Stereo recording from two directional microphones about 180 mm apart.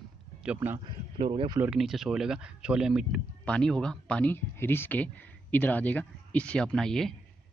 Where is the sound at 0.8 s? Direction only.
30° right (ahead or behind).